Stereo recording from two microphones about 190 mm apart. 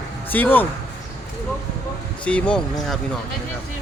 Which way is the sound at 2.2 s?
5° left (ahead or behind).